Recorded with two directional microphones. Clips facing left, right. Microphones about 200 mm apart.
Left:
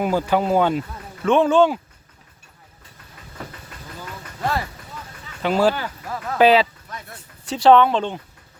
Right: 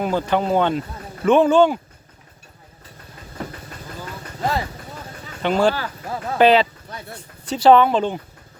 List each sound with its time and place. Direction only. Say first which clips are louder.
0.0 s speech: left 1 dB; 10° left (ahead or behind)
5.4 s speech: even; 5° left (ahead or behind)
6.1 s speech: right 3 dB; 30° right (ahead or behind)
6.4 s speech: even; 5° left (ahead or behind)
6.8 s a sound: right 2 dB; 30° right (ahead or behind)
7.4 s speech: right 1 dB; centre (ahead or behind)